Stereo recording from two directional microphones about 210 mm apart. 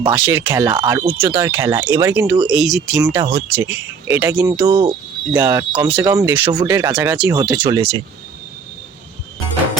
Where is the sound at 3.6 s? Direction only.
10° right (ahead or behind).